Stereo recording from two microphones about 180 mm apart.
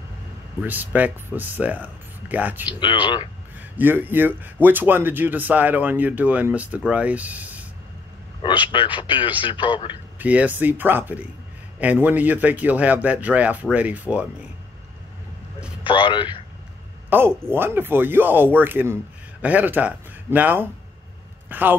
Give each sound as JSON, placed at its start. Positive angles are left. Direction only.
{"t": 0.6, "sound": "a man's voice", "side_deg": -10}
{"t": 2.8, "sound": "a man's voice", "side_deg": 25}
{"t": 3.5, "sound": "a man's voice", "side_deg": -10}
{"t": 8.4, "sound": "a man's voice", "side_deg": 25}
{"t": 10.1, "sound": "a man's voice", "side_deg": -10}
{"t": 15.8, "sound": "a man's voice", "side_deg": 25}
{"t": 17.1, "sound": "a man's voice", "side_deg": -10}